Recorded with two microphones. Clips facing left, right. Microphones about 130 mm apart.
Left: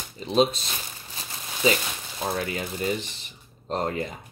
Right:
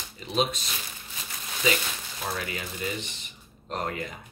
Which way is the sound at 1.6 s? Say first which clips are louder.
Left 4 dB; 30° left (ahead or behind).